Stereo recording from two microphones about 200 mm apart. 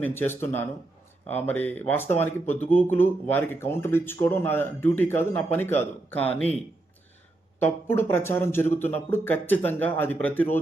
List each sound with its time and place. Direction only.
0.0 s speech: 10° left (ahead or behind)
7.6 s speech: 10° left (ahead or behind)